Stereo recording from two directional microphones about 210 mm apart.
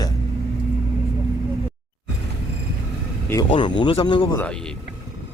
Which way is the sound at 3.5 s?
20° left (ahead or behind).